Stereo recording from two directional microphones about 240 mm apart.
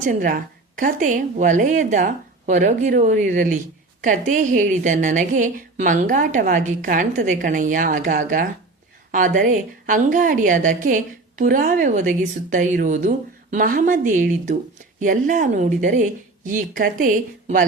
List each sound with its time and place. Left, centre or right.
0.0 s a woman's voice: right